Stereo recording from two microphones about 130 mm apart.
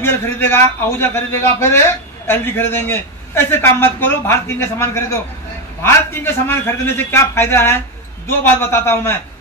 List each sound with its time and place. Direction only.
0.0 s a man's voice: 20° left (ahead or behind)